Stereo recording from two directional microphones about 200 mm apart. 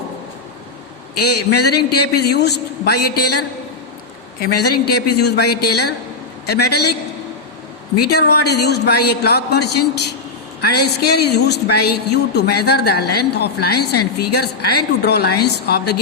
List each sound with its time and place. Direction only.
1.5 s a man's voice: 55° left (ahead or behind)
8.1 s a man's voice: 55° left (ahead or behind)